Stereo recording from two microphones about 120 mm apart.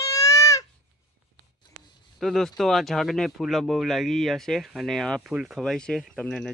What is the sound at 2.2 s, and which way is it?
Speech, centre (ahead or behind).